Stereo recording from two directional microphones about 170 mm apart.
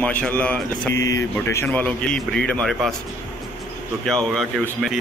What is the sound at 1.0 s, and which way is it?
Speech, 20° left (ahead or behind).